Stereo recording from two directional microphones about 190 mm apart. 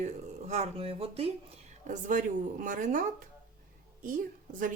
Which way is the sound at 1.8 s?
40° right (ahead or behind).